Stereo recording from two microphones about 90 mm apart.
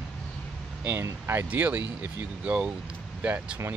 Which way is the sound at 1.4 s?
15° right (ahead or behind).